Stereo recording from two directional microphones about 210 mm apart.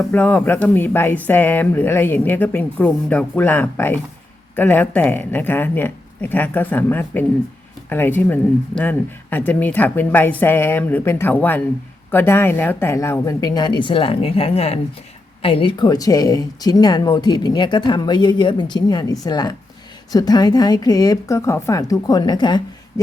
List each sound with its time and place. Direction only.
0.1 s a woman's voice: 5° left (ahead or behind)